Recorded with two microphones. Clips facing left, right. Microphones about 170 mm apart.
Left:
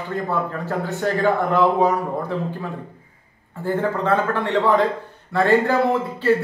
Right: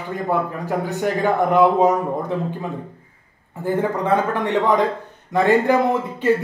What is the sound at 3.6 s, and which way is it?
A man's voice, 15° right (ahead or behind).